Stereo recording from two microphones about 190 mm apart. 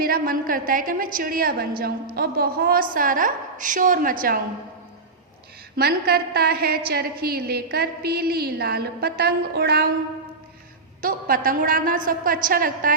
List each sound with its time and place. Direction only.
0.0 s a woman's voice: 50° right (ahead or behind)
5.7 s a woman's voice: 55° right (ahead or behind)
11.0 s a woman's voice: 45° right (ahead or behind)